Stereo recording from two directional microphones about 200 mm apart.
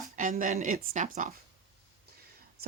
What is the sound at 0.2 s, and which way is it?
Speech, 40° right (ahead or behind).